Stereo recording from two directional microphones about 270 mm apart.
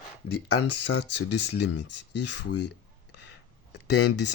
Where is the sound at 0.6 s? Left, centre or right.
Left.